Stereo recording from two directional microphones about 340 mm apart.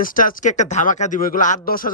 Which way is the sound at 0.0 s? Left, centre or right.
Left.